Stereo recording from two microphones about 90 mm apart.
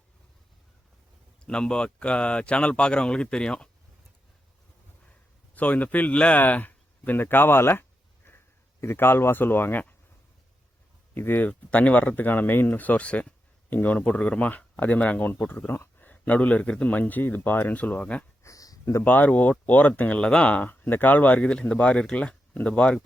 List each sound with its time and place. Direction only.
1.5 s speech: 10° left (ahead or behind)
5.5 s speech: 15° left (ahead or behind)
11.1 s speech: 20° left (ahead or behind)
18.4 s a sound: 40° left (ahead or behind)
19.0 s speech: 20° left (ahead or behind)